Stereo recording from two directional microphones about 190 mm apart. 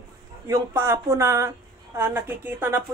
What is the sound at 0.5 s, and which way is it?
Speech, 15° right (ahead or behind).